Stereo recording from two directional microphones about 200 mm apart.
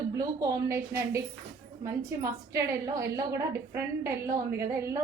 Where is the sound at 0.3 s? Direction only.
15° right (ahead or behind).